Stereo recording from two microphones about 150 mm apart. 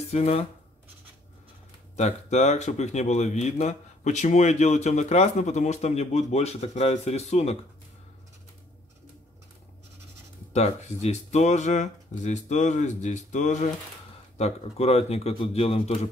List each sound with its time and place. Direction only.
0.1 s speech: 45° left (ahead or behind)
2.0 s speech: 50° left (ahead or behind)
10.5 s speech: 45° left (ahead or behind)